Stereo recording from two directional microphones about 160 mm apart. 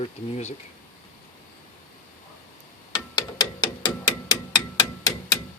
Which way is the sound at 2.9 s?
25° left (ahead or behind).